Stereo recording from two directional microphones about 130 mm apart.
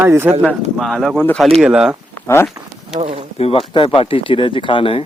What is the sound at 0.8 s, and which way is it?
Speech, centre (ahead or behind).